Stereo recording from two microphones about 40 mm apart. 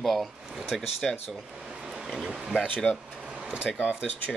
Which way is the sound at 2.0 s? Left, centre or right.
Centre.